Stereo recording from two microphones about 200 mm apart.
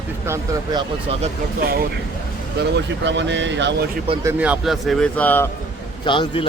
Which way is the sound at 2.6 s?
60° right (ahead or behind).